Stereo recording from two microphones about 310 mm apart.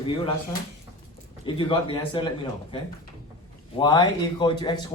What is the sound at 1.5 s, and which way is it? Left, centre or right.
Speech, centre.